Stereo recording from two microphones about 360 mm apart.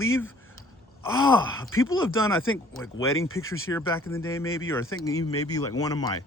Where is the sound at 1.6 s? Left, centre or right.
Left.